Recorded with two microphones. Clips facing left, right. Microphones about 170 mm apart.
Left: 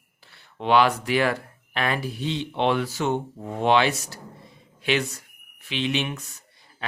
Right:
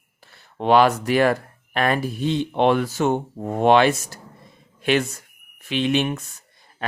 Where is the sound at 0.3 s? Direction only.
45° right (ahead or behind).